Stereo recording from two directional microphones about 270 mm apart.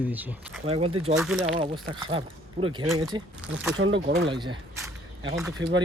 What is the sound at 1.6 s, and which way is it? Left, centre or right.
Speech, centre.